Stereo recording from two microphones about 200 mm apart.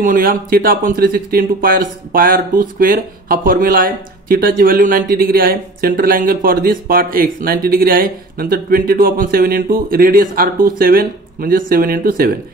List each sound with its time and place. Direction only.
0.0 s speech: 45° right (ahead or behind)